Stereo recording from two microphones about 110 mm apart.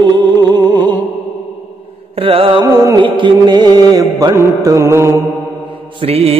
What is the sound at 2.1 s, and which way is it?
Music, 55° right (ahead or behind).